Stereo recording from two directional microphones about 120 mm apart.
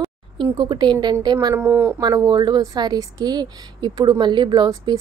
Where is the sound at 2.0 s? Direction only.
35° right (ahead or behind).